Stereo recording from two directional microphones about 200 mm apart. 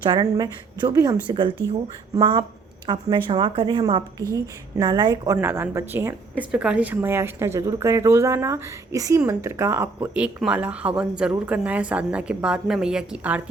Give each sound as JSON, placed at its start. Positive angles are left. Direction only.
{"t": 0.0, "sound": "a woman's voice", "side_deg": -20}